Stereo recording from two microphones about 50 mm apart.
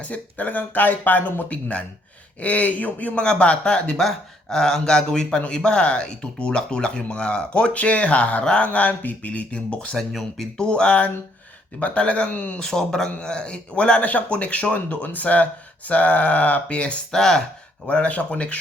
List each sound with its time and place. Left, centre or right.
0.0 s speech: left
3.9 s speech: centre
10.1 s speech: centre
10.6 s speech: centre
12.5 s speech: centre
17.1 s speech: centre
17.8 s speech: left